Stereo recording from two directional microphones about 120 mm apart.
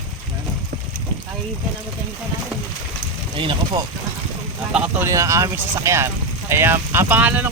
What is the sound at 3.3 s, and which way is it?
Speech, 45° right (ahead or behind).